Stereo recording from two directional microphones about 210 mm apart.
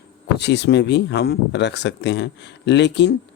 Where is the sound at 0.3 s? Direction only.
55° left (ahead or behind).